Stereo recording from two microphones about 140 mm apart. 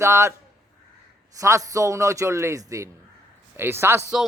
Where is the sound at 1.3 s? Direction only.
25° right (ahead or behind).